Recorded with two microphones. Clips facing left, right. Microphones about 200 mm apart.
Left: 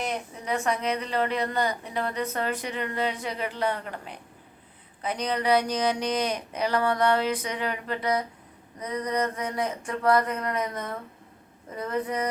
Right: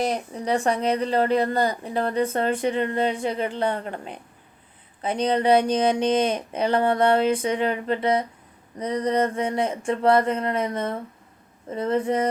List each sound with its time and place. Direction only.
0.0 s speech: 35° right (ahead or behind)